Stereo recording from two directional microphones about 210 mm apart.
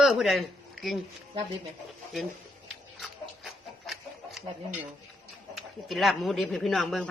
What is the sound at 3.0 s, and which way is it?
Chicken, centre (ahead or behind).